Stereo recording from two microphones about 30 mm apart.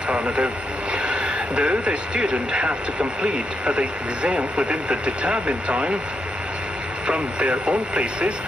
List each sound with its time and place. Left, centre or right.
0.1 s speech: right
0.9 s a sound: right
2.5 s speech: right
7.1 s speech: right